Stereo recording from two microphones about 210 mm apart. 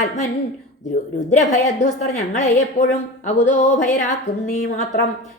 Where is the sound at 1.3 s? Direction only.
35° left (ahead or behind).